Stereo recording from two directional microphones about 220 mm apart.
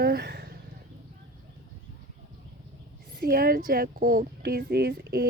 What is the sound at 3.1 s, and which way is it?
Speech, 40° right (ahead or behind).